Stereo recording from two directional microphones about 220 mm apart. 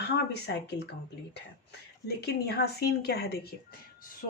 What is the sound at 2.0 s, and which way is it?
A woman's voice, 45° left (ahead or behind).